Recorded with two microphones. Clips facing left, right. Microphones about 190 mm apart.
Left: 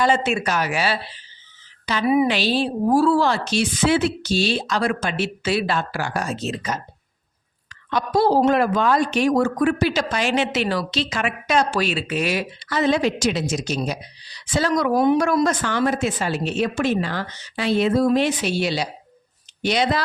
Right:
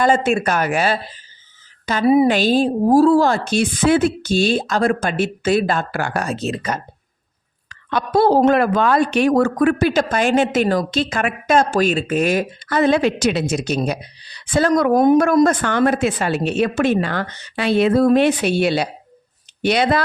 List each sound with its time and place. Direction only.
0.0 s a woman's voice: 50° right (ahead or behind)